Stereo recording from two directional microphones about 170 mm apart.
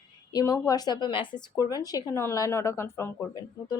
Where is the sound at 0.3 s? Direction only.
20° left (ahead or behind).